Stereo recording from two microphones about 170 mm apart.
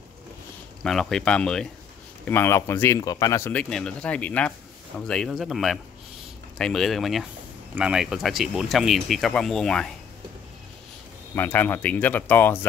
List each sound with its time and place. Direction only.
0.8 s speech: 5° left (ahead or behind)
11.3 s speech: 10° left (ahead or behind)